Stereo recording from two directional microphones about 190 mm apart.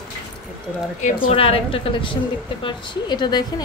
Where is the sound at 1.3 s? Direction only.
30° left (ahead or behind).